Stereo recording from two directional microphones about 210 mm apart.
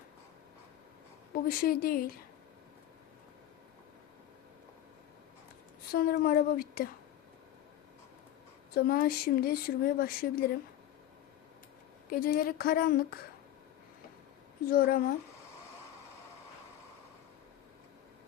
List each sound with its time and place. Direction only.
1.5 s speech: 45° left (ahead or behind)
5.9 s speech: 45° left (ahead or behind)
8.7 s speech: 45° left (ahead or behind)
12.1 s speech: 45° left (ahead or behind)
14.7 s speech: 45° left (ahead or behind)